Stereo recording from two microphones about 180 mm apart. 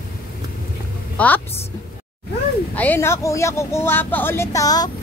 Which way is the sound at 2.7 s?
10° left (ahead or behind).